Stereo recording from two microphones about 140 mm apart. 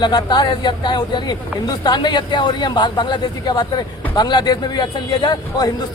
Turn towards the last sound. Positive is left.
turn(degrees=30)  # may be behind; listen again after turning